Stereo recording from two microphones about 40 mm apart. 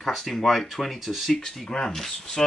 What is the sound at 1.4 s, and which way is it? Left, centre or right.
Speech, centre.